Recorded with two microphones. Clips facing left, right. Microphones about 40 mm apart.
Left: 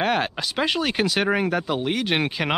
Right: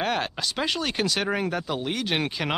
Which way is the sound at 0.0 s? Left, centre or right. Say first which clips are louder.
Left 4 dB; centre.